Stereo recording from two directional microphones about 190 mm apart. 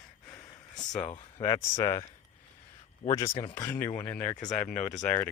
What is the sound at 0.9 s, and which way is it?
Speech, 40° left (ahead or behind).